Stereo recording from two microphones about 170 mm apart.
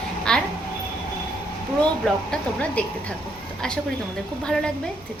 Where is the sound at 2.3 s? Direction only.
5° left (ahead or behind).